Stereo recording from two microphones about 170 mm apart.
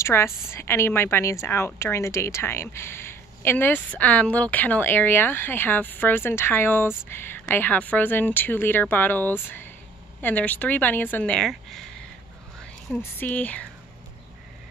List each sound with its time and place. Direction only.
0.0 s a woman's voice: 15° left (ahead or behind)
12.9 s a woman's voice: 10° left (ahead or behind)